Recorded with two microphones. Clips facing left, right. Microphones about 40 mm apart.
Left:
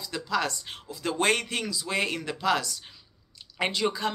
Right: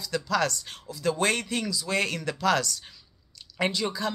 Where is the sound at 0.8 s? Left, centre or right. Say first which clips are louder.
Even; left.